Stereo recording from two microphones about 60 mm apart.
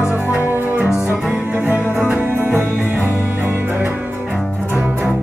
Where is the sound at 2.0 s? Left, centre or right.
Right.